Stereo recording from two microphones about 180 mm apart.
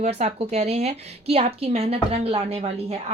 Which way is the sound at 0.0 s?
40° right (ahead or behind).